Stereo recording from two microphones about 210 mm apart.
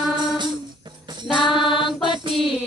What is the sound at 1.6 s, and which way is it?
Music, 25° left (ahead or behind).